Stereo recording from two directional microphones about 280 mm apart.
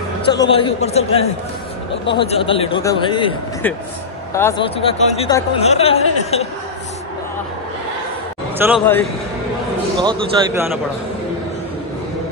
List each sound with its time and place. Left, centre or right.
0.3 s a man's voice: centre
8.5 s a man's voice: centre
9.9 s a man's voice: centre